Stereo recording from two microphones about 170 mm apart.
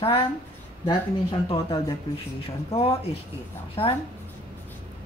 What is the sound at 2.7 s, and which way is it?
Speech, 35° left (ahead or behind).